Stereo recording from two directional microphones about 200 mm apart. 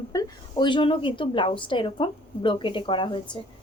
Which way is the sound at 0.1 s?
20° left (ahead or behind).